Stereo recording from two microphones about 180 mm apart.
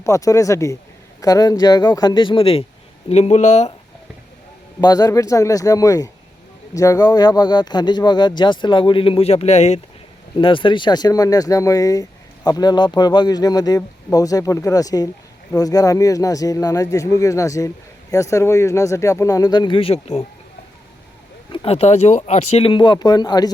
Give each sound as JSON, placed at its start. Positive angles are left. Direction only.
{"t": 0.0, "sound": "speech", "side_deg": 15}
{"t": 4.8, "sound": "speech", "side_deg": 20}
{"t": 10.3, "sound": "speech", "side_deg": 30}
{"t": 21.5, "sound": "speech", "side_deg": 30}